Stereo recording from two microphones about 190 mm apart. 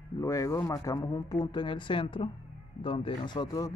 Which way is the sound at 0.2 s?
15° left (ahead or behind).